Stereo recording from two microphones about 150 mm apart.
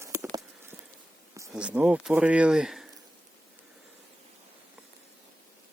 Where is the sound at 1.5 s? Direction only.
10° right (ahead or behind).